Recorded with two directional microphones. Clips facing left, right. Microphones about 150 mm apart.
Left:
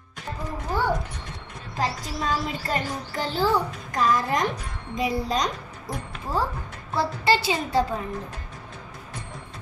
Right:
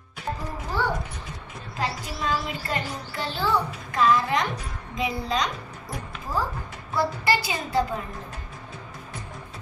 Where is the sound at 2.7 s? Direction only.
40° left (ahead or behind).